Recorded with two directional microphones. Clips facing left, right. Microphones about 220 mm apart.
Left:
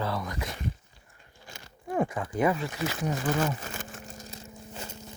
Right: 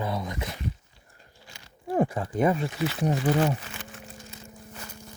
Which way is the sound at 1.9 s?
35° right (ahead or behind).